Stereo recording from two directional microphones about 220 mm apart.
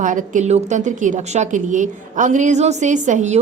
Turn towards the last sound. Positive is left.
turn(degrees=-35)  # may be behind; listen again after turning